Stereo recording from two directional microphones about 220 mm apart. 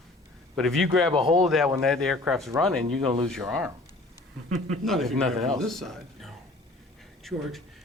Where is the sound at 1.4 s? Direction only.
Centre (ahead or behind).